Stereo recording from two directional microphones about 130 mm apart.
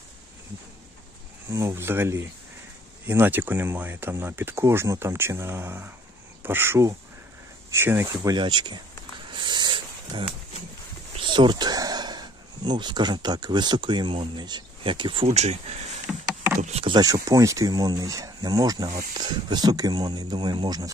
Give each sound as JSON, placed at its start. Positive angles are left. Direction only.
{"t": 1.5, "sound": "speech", "side_deg": -20}
{"t": 9.3, "sound": "a sound", "side_deg": -35}
{"t": 11.1, "sound": "speech", "side_deg": -40}
{"t": 15.2, "sound": "speech", "side_deg": -60}
{"t": 16.8, "sound": "speech", "side_deg": -30}